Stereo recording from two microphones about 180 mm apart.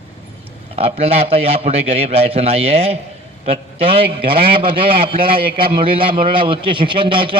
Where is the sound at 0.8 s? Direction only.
35° right (ahead or behind).